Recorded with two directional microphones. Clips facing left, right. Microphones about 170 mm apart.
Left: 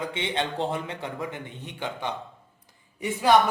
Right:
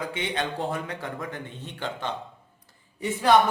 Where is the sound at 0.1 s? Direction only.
25° left (ahead or behind).